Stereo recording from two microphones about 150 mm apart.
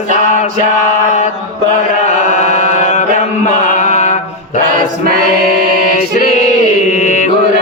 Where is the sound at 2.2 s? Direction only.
55° left (ahead or behind).